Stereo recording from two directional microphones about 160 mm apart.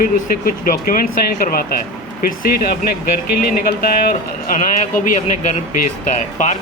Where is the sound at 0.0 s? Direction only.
60° left (ahead or behind).